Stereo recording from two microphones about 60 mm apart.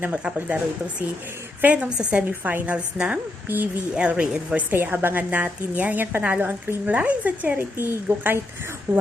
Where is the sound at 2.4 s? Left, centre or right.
Right.